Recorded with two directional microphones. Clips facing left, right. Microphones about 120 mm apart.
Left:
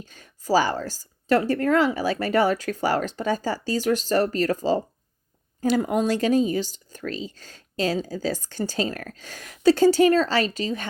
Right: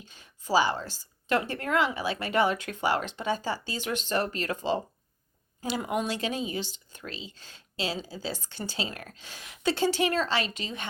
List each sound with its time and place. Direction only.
0.0 s speech: 45° left (ahead or behind)